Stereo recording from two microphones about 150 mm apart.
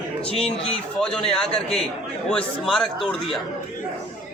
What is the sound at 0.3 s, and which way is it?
Speech, 40° left (ahead or behind).